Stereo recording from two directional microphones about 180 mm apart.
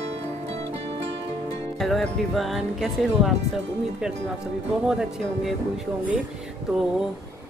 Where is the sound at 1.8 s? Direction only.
Centre (ahead or behind).